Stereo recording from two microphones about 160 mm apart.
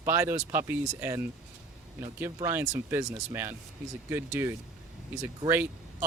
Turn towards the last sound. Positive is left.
turn(degrees=-15)  # may be behind; listen again after turning